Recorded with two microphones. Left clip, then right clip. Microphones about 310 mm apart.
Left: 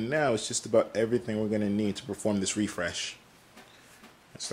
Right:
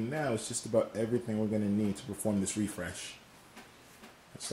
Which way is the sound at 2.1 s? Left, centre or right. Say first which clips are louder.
Left 6 dB; centre.